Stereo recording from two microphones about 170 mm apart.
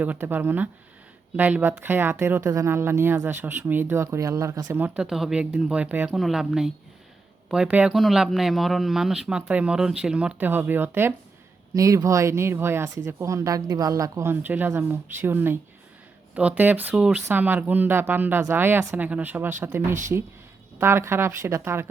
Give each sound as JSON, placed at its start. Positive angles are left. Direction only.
{"t": 0.0, "sound": "a woman's voice", "side_deg": -10}